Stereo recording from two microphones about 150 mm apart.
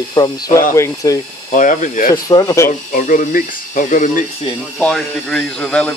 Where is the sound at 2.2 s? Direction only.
25° left (ahead or behind).